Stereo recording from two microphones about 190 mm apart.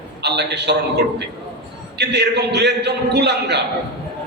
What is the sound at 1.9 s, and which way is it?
A man's voice, 60° right (ahead or behind).